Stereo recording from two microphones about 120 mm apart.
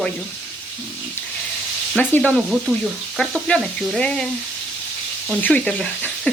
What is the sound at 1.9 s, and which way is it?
Speech, 15° left (ahead or behind).